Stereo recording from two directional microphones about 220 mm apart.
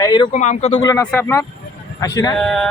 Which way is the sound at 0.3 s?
30° left (ahead or behind).